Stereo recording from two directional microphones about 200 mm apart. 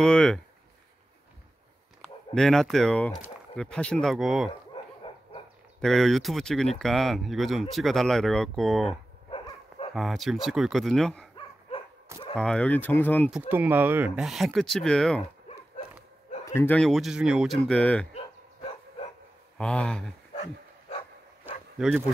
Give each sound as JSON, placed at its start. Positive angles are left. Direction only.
{"t": 0.0, "sound": "speech", "side_deg": 5}
{"t": 2.0, "sound": "speech", "side_deg": 0}
{"t": 4.5, "sound": "dog", "side_deg": 25}
{"t": 5.8, "sound": "speech", "side_deg": 0}
{"t": 12.4, "sound": "speech", "side_deg": 5}
{"t": 13.3, "sound": "speech", "side_deg": -10}
{"t": 16.4, "sound": "speech", "side_deg": 10}
{"t": 18.1, "sound": "dog", "side_deg": 30}
{"t": 19.6, "sound": "speech", "side_deg": 5}
{"t": 21.7, "sound": "speech", "side_deg": -5}